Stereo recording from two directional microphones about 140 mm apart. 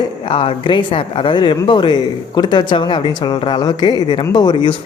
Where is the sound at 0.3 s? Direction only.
40° left (ahead or behind).